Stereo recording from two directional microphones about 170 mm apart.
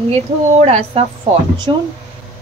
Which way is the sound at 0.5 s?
40° right (ahead or behind).